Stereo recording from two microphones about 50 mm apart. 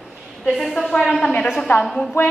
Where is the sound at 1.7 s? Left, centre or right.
Left.